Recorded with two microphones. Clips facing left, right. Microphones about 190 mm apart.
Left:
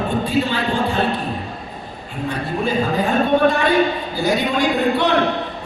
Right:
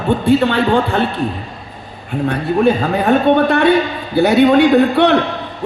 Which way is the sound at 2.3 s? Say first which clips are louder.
Right 8 dB; 60° right (ahead or behind).